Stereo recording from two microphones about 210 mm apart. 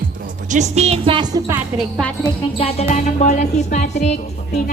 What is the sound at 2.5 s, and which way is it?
Speech, 30° left (ahead or behind).